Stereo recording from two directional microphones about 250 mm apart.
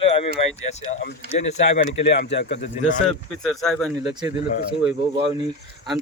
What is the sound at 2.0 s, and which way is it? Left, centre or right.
Speech, left.